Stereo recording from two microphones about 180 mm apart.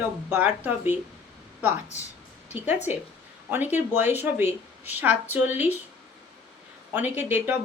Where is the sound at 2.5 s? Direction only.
10° right (ahead or behind).